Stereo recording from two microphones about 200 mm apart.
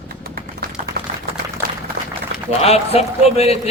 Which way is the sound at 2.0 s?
55° right (ahead or behind).